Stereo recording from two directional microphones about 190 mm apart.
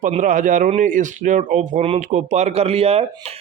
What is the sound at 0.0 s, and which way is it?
Speech, 40° right (ahead or behind).